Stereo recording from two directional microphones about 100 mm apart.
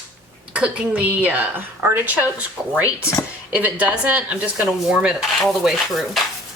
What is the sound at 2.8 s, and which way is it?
Speech, 30° left (ahead or behind).